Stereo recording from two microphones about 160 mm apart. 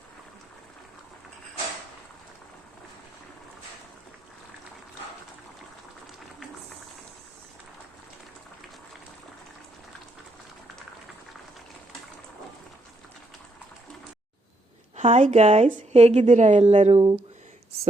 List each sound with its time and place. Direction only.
14.9 s a woman's voice: 50° right (ahead or behind)